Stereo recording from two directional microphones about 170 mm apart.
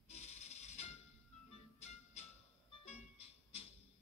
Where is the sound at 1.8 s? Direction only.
40° left (ahead or behind).